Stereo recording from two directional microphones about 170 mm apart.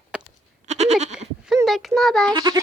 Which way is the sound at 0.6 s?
40° right (ahead or behind).